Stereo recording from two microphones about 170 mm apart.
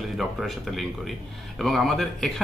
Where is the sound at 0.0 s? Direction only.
Centre (ahead or behind).